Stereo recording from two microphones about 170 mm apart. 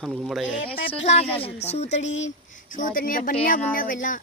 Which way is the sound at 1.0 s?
35° left (ahead or behind).